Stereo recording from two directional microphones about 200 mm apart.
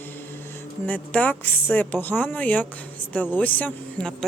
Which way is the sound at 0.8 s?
5° left (ahead or behind).